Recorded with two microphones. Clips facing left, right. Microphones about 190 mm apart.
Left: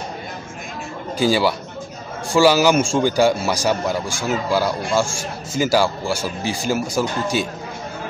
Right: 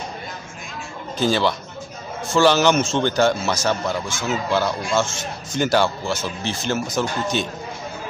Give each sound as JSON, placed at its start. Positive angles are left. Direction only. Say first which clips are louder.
{"t": 1.1, "sound": "a man's voice", "louder": "left 2 dB", "side_deg": 10}